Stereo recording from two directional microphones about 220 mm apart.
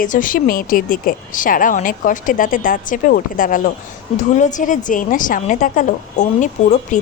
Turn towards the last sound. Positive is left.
turn(degrees=35)  # may be behind; listen again after turning